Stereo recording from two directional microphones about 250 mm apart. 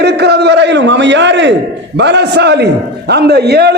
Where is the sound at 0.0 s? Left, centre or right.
Right.